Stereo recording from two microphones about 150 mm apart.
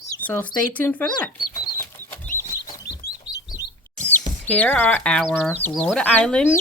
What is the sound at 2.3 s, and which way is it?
Chicken, 60° left (ahead or behind).